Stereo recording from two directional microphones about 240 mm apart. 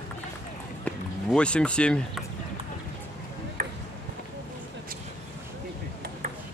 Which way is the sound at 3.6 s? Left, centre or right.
Right.